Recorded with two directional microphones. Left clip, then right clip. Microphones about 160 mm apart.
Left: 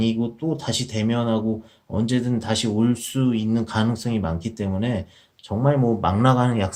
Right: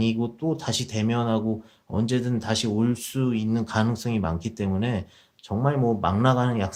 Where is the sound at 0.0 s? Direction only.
40° right (ahead or behind).